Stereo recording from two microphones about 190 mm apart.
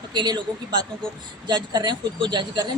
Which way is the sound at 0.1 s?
25° right (ahead or behind).